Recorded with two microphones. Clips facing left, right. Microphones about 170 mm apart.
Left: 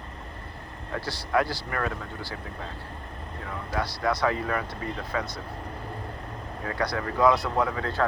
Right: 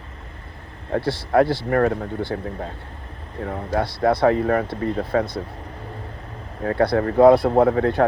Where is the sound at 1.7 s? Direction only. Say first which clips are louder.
Right 11 dB; 45° right (ahead or behind).